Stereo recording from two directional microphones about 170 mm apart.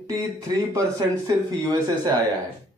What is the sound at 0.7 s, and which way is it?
Speech, 20° right (ahead or behind).